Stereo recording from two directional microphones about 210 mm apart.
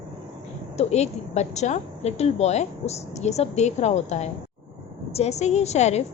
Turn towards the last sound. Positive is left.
turn(degrees=30)  # may be behind; listen again after turning